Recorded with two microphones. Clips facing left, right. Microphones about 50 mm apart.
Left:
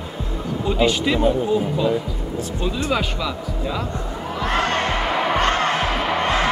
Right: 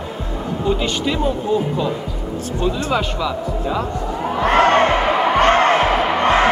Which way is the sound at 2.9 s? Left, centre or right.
Centre.